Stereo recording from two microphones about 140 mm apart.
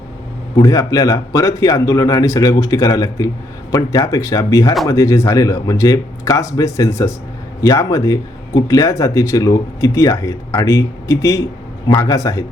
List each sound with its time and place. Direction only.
0.5 s speech: 25° left (ahead or behind)